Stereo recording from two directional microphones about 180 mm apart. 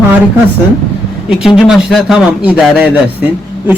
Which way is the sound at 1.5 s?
Centre (ahead or behind).